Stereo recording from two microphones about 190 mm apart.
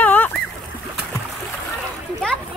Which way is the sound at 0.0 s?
10° left (ahead or behind).